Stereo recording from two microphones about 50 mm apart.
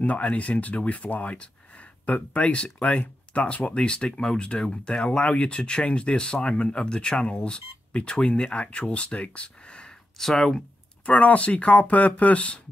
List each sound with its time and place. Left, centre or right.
0.0 s speech: left; by 10.6 s centre
11.1 s speech: left